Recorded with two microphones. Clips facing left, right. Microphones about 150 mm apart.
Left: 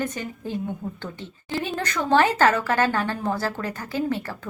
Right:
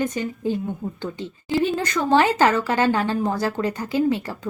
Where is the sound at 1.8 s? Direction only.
15° right (ahead or behind).